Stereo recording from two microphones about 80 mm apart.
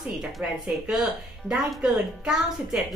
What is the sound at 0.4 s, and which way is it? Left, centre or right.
Speech, right.